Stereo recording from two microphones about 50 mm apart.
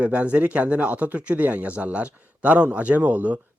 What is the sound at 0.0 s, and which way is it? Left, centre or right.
Speech, right.